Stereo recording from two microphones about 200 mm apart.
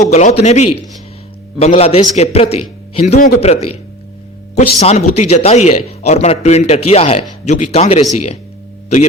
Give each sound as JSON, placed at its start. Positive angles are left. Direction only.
{"t": 0.1, "sound": "speech", "side_deg": 35}